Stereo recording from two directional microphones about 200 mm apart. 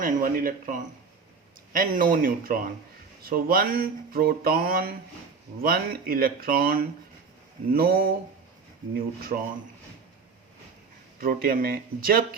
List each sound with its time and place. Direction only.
0.0 s speech: 45° right (ahead or behind)
11.2 s speech: 45° right (ahead or behind)